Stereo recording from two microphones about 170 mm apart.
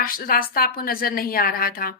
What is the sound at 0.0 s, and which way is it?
A woman's voice, 60° left (ahead or behind).